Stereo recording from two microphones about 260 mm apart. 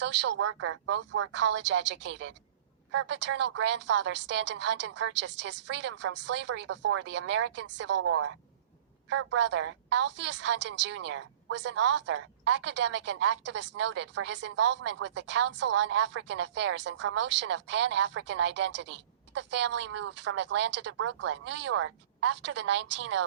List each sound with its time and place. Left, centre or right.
0.0 s speech: right
0.4 s speech: right
1.6 s speech: right